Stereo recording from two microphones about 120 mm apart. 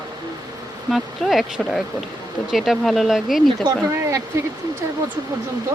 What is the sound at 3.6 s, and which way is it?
Speech, 25° right (ahead or behind).